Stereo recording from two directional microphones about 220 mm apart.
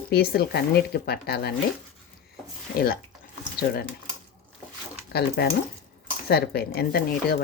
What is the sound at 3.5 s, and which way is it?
Speech, 45° left (ahead or behind).